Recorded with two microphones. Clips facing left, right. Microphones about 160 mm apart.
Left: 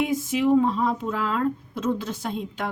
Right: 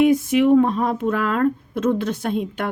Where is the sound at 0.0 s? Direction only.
65° right (ahead or behind).